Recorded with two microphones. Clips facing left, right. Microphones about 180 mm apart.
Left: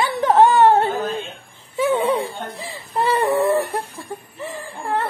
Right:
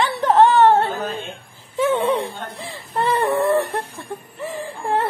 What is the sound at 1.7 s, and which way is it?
Whimper, centre (ahead or behind).